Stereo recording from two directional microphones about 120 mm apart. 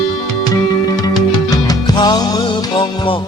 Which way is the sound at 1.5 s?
35° left (ahead or behind).